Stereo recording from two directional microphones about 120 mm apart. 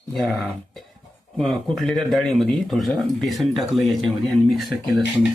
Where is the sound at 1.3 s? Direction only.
Centre (ahead or behind).